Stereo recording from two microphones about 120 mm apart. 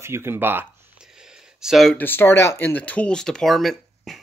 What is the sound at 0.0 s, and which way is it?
Speech, 20° right (ahead or behind).